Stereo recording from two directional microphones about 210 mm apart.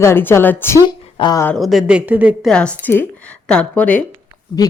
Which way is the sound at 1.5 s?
Centre (ahead or behind).